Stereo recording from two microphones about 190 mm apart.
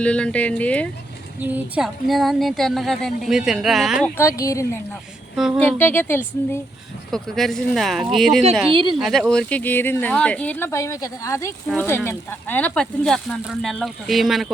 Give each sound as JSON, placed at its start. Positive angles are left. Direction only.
{"t": 0.0, "sound": "a woman's voice", "side_deg": 5}
{"t": 1.4, "sound": "speech", "side_deg": -10}
{"t": 4.2, "sound": "a woman's voice", "side_deg": 15}
{"t": 5.8, "sound": "a woman's voice", "side_deg": 10}
{"t": 7.1, "sound": "a woman's voice", "side_deg": 0}